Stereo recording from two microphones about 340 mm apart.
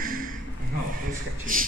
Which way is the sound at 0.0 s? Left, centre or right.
Right.